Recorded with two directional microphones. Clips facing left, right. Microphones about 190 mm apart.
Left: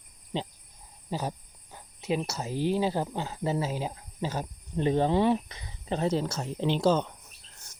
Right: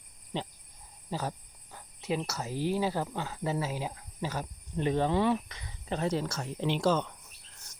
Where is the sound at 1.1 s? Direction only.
15° left (ahead or behind).